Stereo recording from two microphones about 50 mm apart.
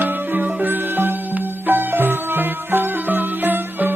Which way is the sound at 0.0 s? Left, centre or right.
Right.